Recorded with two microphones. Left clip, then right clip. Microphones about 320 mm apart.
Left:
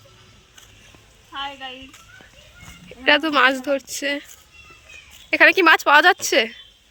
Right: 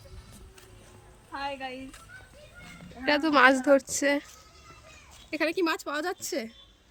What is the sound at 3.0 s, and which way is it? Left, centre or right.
A woman's voice, centre.